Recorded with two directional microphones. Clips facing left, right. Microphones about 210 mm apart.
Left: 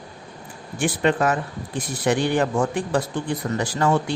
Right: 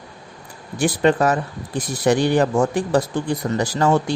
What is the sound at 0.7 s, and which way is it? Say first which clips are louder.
Speech: right 4 dB; 40° right (ahead or behind).